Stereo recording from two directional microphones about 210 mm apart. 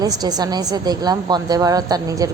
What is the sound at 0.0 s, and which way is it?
A woman's voice, 20° right (ahead or behind).